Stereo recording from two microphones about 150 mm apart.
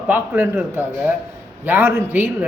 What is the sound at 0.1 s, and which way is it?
A woman's voice, 15° right (ahead or behind).